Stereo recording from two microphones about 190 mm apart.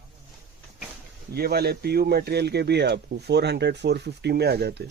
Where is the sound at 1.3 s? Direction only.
55° right (ahead or behind).